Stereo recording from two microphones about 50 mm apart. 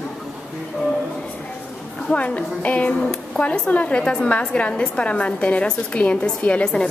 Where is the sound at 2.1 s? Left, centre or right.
Left.